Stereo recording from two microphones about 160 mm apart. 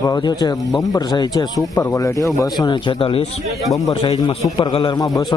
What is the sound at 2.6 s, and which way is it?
A man's voice, 30° left (ahead or behind).